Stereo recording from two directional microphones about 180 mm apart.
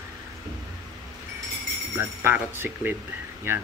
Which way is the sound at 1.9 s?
10° right (ahead or behind).